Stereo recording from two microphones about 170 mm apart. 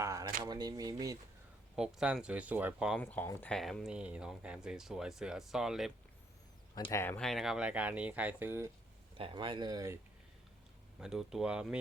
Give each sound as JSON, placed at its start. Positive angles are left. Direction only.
{"t": 0.0, "sound": "a sound", "side_deg": -20}
{"t": 0.4, "sound": "speech", "side_deg": -25}
{"t": 1.7, "sound": "speech", "side_deg": -5}
{"t": 3.0, "sound": "speech", "side_deg": 10}
{"t": 6.7, "sound": "speech", "side_deg": 20}
{"t": 7.2, "sound": "speech", "side_deg": 0}
{"t": 9.1, "sound": "speech", "side_deg": -30}
{"t": 11.0, "sound": "speech", "side_deg": -5}